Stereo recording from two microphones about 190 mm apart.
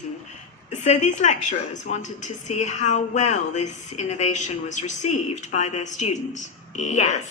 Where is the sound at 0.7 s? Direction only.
40° left (ahead or behind).